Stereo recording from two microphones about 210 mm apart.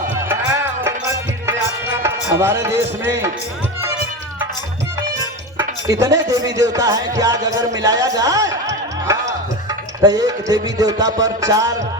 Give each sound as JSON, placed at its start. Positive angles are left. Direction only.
{"t": 0.9, "sound": "music", "side_deg": -15}
{"t": 5.5, "sound": "speech", "side_deg": -15}
{"t": 10.0, "sound": "speech", "side_deg": -15}